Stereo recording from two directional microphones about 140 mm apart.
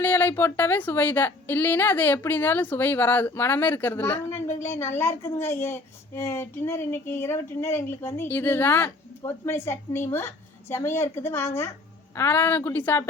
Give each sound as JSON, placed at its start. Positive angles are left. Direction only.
{"t": 0.0, "sound": "a woman's voice", "side_deg": 15}